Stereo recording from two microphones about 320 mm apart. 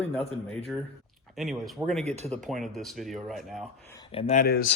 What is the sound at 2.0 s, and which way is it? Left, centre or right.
Speech, centre.